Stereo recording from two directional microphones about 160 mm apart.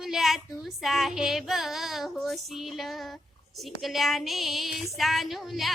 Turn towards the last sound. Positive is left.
turn(degrees=0)  # may be behind; listen again after turning